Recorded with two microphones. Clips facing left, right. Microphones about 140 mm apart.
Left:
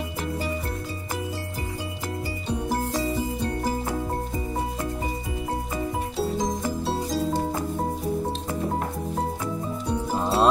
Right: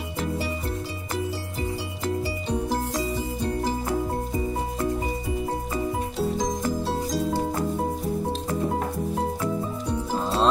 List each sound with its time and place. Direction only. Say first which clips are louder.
6.4 s music: right 1 dB; 5° left (ahead or behind)
10.1 s music: left 2 dB; 15° left (ahead or behind)